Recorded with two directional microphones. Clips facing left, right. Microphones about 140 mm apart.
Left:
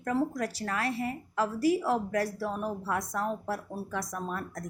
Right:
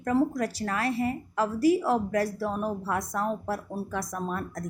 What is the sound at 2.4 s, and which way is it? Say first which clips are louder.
Speech: right 3 dB; 50° right (ahead or behind).